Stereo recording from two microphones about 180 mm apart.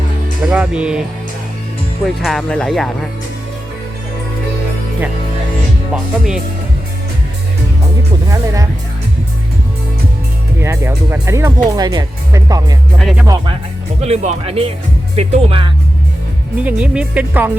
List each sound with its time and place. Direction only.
0.4 s speech: 5° right (ahead or behind)
2.0 s speech: centre (ahead or behind)
5.9 s speech: 5° right (ahead or behind)
10.6 s speech: 15° right (ahead or behind)
13.0 s speech: centre (ahead or behind)
13.2 s speech: 25° right (ahead or behind)
14.0 s speech: 40° right (ahead or behind)
16.6 s speech: 5° right (ahead or behind)